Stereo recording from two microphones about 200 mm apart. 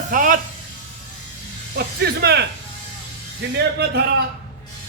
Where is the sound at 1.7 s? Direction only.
55° right (ahead or behind).